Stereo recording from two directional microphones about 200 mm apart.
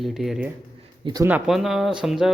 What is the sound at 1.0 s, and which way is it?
Speech, 20° right (ahead or behind).